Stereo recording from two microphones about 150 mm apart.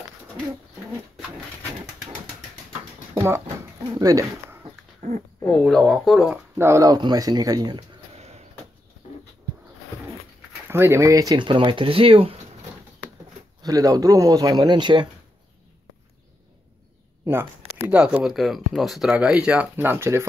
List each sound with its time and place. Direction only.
3.2 s a sound: 15° right (ahead or behind)
5.0 s speech: 70° right (ahead or behind)
5.4 s speech: 10° left (ahead or behind)
6.5 s speech: 20° right (ahead or behind)
8.1 s a sound: 45° right (ahead or behind)
10.7 s speech: 15° right (ahead or behind); by 12.4 s 40° right (ahead or behind)
13.6 s speech: 25° right (ahead or behind)
17.2 s a sound: 15° right (ahead or behind)
17.8 s speech: 10° right (ahead or behind)